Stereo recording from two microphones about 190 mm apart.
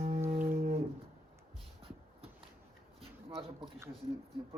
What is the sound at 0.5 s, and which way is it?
Music, 45° right (ahead or behind).